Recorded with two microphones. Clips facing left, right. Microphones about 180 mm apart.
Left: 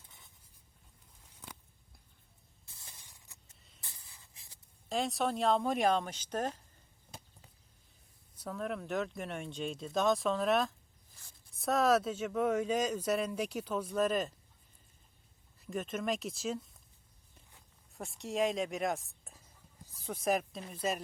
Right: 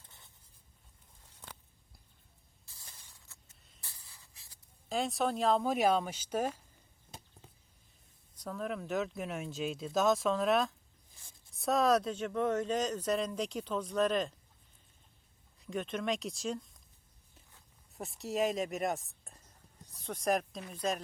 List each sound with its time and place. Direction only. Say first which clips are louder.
2.6 s spray: left 1 dB; 20° left (ahead or behind)
4.9 s speech: right 1 dB; centre (ahead or behind)
8.4 s speech: even; centre (ahead or behind)
15.5 s speech: right 1 dB; centre (ahead or behind)
17.9 s speech: right 1 dB; centre (ahead or behind)